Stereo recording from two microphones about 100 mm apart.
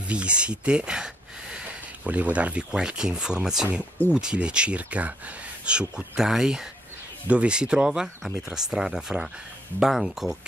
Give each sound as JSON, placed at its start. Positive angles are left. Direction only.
{"t": 0.1, "sound": "speech", "side_deg": -10}